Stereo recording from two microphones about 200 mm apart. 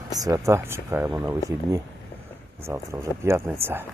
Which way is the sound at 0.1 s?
15° right (ahead or behind).